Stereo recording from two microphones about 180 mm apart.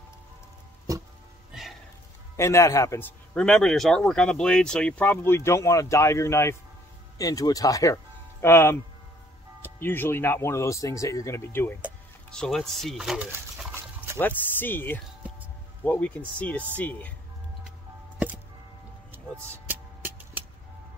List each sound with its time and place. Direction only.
0.9 s music: 20° right (ahead or behind)
1.5 s music: centre (ahead or behind)
2.3 s a man's voice: 15° left (ahead or behind); by 13.3 s 5° right (ahead or behind)
13.6 s dog: 10° right (ahead or behind)
14.1 s a man's voice: 10° left (ahead or behind)
19.7 s music: 10° right (ahead or behind)